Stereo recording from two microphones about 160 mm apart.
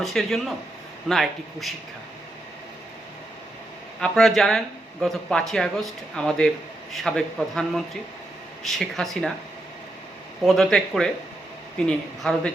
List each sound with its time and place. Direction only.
0.0 s speech: centre (ahead or behind)
4.0 s speech: centre (ahead or behind)
10.4 s speech: centre (ahead or behind)